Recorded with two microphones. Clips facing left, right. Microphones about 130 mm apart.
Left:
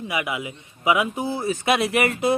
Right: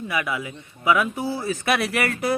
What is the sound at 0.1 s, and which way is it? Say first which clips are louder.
A man's voice: even; 20° left (ahead or behind).